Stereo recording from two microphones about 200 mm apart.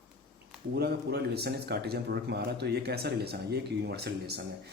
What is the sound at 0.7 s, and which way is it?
Speech, 55° right (ahead or behind).